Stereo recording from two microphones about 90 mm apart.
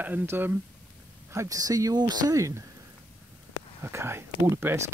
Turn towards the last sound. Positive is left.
turn(degrees=-30)  # may be behind; listen again after turning